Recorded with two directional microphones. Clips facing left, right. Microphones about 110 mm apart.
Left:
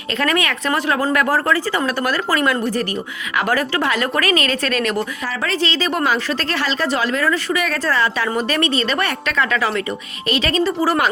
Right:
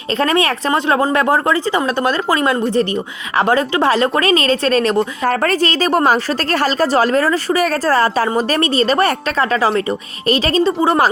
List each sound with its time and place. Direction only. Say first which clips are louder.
0.2 s speech: right 4 dB; 30° right (ahead or behind)
5.2 s a woman's voice: right 6 dB; 50° right (ahead or behind); by 11.1 s 30° right (ahead or behind)